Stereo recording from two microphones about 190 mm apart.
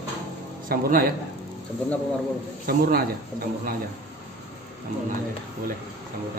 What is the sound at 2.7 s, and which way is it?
Speech, 55° right (ahead or behind).